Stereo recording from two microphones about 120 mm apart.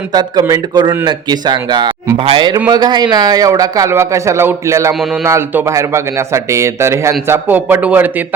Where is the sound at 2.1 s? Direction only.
45° right (ahead or behind); by 4.9 s 25° right (ahead or behind).